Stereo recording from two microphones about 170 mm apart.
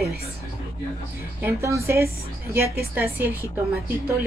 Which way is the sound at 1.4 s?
15° right (ahead or behind).